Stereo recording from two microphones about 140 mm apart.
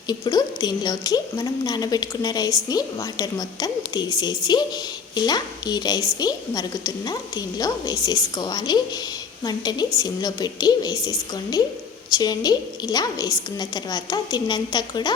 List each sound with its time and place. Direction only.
0.1 s a woman's voice: 30° left (ahead or behind)
12.1 s a woman's voice: 30° left (ahead or behind)